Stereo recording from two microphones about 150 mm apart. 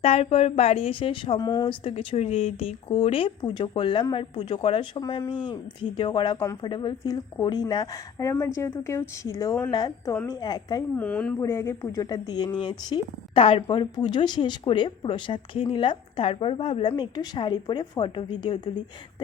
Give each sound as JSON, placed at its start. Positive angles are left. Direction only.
{"t": 0.0, "sound": "a woman's voice", "side_deg": 45}
{"t": 10.9, "sound": "speech", "side_deg": 10}
{"t": 16.9, "sound": "speech", "side_deg": 25}